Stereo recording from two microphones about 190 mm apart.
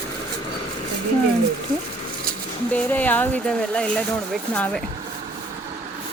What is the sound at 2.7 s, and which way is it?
Speech, 10° left (ahead or behind).